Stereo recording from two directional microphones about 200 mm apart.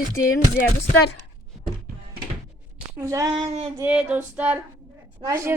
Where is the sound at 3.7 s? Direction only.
5° right (ahead or behind).